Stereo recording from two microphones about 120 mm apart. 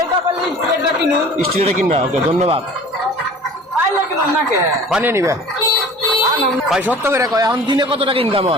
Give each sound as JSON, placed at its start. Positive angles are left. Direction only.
{"t": 1.6, "sound": "speech", "side_deg": -60}
{"t": 5.0, "sound": "speech", "side_deg": -25}
{"t": 6.7, "sound": "speech", "side_deg": -5}
{"t": 7.0, "sound": "speech", "side_deg": -25}